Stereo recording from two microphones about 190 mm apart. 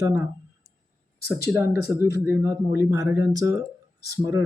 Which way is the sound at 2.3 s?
15° right (ahead or behind).